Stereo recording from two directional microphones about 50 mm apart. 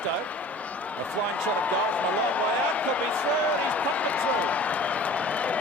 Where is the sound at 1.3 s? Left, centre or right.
Left.